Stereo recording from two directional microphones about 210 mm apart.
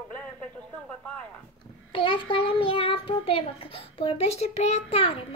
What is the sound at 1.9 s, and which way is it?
A child's voice, 25° left (ahead or behind).